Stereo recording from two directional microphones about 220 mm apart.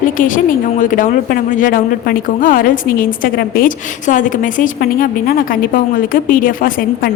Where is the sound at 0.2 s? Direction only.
40° left (ahead or behind).